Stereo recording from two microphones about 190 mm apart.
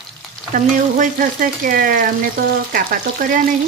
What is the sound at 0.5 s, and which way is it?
Frying, 45° right (ahead or behind).